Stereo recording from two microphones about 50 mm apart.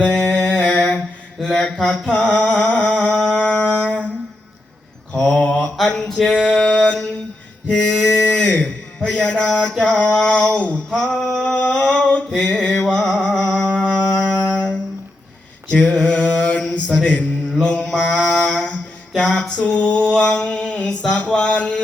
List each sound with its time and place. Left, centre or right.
0.0 s a sound: left
1.4 s mantra: centre
2.0 s music: left
5.2 s mantra: centre
6.5 s a sound: left
10.9 s a sound: centre
12.5 s music: centre
14.3 s music: left
15.7 s mantra: left
17.0 s speech: centre
17.6 s mantra: left
17.9 s a sound: left